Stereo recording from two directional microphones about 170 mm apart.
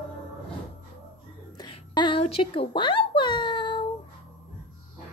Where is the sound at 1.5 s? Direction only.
25° left (ahead or behind).